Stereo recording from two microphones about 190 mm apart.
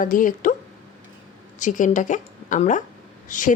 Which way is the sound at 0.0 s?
45° left (ahead or behind).